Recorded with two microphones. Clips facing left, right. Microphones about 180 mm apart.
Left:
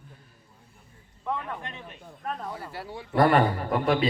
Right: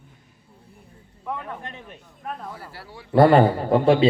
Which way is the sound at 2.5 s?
20° left (ahead or behind).